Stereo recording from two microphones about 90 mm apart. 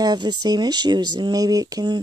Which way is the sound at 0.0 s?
50° right (ahead or behind).